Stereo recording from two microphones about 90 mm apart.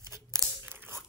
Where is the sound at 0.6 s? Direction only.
25° right (ahead or behind).